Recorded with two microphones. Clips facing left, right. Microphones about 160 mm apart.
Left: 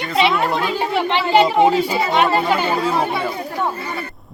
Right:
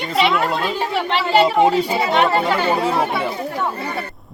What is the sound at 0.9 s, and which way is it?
Speech, centre (ahead or behind).